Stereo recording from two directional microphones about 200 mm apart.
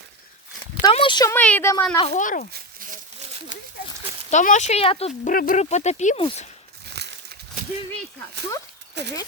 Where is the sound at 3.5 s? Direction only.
40° left (ahead or behind).